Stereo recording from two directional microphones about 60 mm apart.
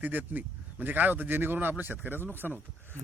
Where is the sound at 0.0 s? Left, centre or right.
Right.